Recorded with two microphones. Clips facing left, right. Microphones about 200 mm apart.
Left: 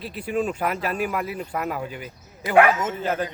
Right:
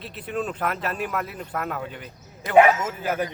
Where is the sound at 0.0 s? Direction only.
5° left (ahead or behind).